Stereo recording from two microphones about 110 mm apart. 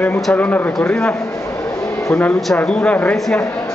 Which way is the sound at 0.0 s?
15° left (ahead or behind).